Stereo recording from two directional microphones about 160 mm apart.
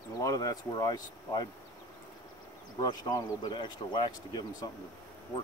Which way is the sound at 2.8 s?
20° left (ahead or behind).